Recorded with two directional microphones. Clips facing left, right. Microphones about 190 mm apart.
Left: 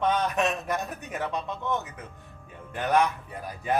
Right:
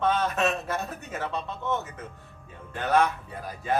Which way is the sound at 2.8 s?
15° left (ahead or behind).